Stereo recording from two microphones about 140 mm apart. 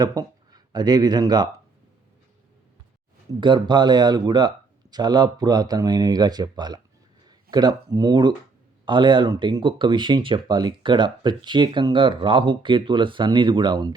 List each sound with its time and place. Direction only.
0.0 s speech: 25° right (ahead or behind)
3.4 s speech: 35° right (ahead or behind)